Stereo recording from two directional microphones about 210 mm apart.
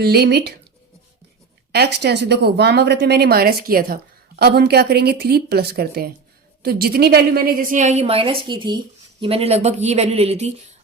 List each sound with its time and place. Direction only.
0.0 s speech: 50° right (ahead or behind)
1.7 s a woman's voice: 50° right (ahead or behind); by 10.8 s 30° right (ahead or behind)